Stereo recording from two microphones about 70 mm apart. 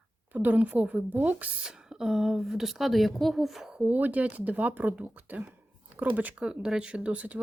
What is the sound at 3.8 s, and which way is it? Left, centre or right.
Speech, right.